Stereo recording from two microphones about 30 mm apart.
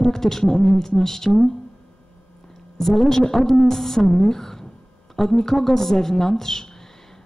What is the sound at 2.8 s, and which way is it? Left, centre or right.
A woman's voice, centre.